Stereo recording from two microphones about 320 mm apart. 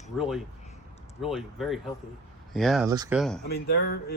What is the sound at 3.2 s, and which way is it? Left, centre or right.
Speech, centre.